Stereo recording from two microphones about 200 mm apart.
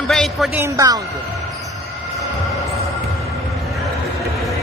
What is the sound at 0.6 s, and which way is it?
Speech, 15° right (ahead or behind).